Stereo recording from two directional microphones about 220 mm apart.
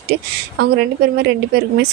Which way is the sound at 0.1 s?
45° right (ahead or behind).